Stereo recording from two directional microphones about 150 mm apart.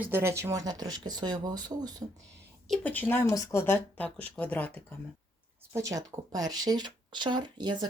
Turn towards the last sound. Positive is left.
turn(degrees=-30)  # may be behind; listen again after turning